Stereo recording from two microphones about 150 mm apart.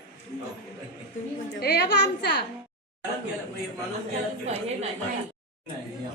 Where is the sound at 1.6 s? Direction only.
90° left.